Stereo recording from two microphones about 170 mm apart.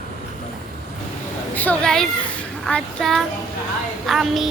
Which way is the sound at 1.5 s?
5° left (ahead or behind).